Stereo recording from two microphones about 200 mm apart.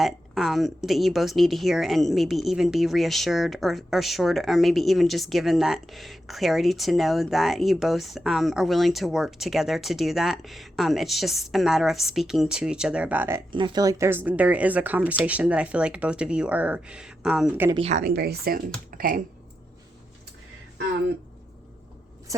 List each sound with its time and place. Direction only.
0.0 s speech: centre (ahead or behind)
13.5 s speech: 20° right (ahead or behind); by 17.7 s 5° right (ahead or behind)
17.8 s a woman's voice: 40° right (ahead or behind)
18.1 s speech: 50° right (ahead or behind)